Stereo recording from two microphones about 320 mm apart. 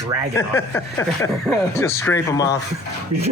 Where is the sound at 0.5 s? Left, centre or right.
Centre.